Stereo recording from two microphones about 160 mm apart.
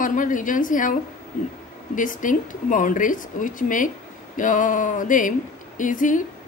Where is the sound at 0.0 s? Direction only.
55° left (ahead or behind).